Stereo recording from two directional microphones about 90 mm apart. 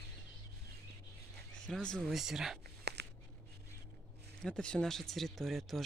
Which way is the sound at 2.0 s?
5° right (ahead or behind).